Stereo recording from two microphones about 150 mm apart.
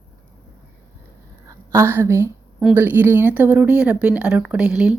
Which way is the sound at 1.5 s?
15° right (ahead or behind).